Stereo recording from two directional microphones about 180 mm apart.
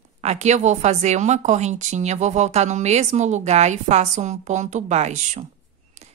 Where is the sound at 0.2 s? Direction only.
40° right (ahead or behind).